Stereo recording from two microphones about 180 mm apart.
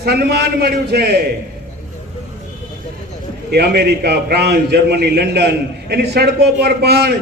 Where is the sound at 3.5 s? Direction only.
65° right (ahead or behind).